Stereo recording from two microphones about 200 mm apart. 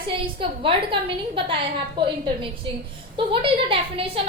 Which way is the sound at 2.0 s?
25° right (ahead or behind).